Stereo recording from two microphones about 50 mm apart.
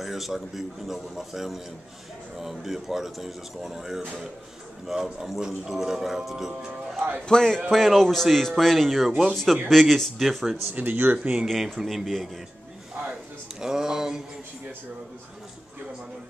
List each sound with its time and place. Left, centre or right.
0.0 s a man's voice: centre
7.2 s a man's voice: centre
10.7 s speech: right
11.4 s speech: centre
13.1 s speech: centre